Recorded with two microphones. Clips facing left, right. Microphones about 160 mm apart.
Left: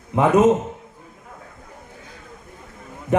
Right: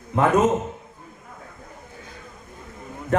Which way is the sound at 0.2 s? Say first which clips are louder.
Left 3 dB; 15° left (ahead or behind).